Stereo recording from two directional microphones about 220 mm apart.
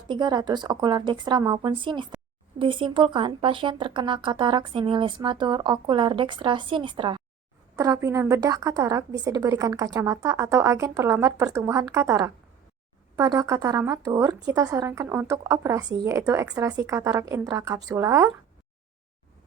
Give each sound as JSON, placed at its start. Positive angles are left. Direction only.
{"t": 0.1, "sound": "speech", "side_deg": -20}